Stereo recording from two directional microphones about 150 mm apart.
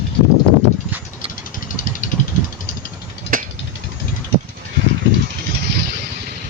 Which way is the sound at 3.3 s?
70° right (ahead or behind).